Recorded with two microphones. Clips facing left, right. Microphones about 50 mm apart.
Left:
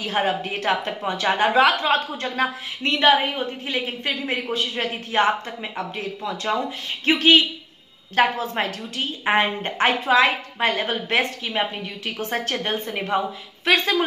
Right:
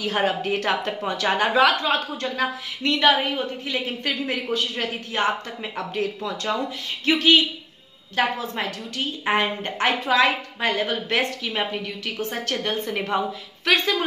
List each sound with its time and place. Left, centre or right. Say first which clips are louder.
0.0 s speech: even; centre
1.3 s a woman's voice: left 1 dB; left
5.6 s speech: right 2 dB; centre
7.1 s a woman's voice: left 1 dB; left
8.9 s a woman's voice: left 2 dB; left
12.8 s speech: left 1 dB; centre